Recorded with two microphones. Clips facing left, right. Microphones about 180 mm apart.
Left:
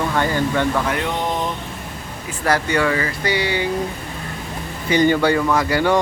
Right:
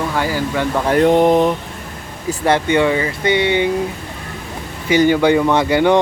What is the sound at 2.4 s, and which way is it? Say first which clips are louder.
Speech: right 4 dB; 25° right (ahead or behind).